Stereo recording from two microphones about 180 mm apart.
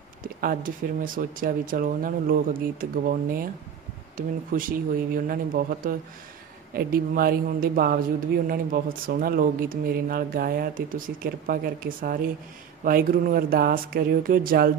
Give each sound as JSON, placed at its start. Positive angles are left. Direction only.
{"t": 0.2, "sound": "speech", "side_deg": -50}
{"t": 4.6, "sound": "speech", "side_deg": -50}
{"t": 9.0, "sound": "speech", "side_deg": -55}